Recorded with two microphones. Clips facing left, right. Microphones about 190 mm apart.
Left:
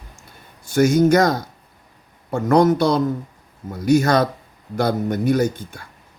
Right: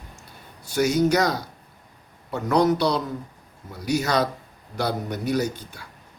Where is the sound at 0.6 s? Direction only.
50° left (ahead or behind).